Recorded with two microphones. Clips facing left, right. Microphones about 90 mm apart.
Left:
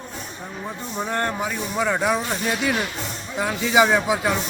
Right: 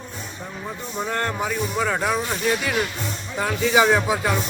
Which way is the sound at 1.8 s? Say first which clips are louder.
Left 3 dB; 10° left (ahead or behind).